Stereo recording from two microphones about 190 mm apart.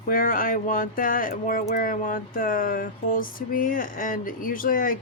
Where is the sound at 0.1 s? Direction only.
50° left (ahead or behind).